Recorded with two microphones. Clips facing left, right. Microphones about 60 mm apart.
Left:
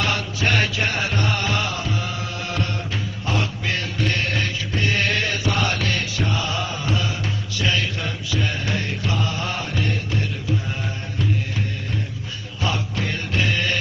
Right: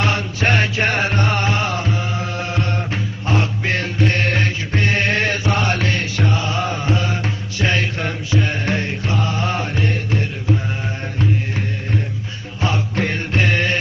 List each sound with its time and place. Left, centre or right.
0.0 s music: right
7.6 s mantra: right
12.6 s mantra: right